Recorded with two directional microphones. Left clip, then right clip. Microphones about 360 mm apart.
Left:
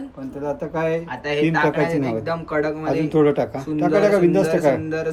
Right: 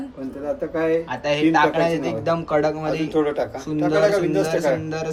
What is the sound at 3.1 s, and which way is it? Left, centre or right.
A man's voice, centre.